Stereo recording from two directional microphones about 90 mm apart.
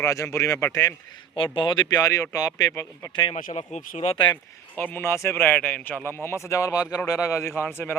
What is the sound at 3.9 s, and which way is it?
Speech, 80° left.